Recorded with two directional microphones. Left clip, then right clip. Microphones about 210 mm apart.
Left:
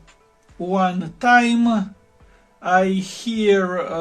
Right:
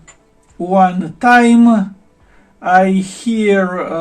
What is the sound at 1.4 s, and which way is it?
Speech, 55° left (ahead or behind).